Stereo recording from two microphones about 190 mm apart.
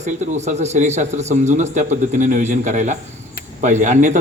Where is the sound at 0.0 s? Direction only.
40° right (ahead or behind).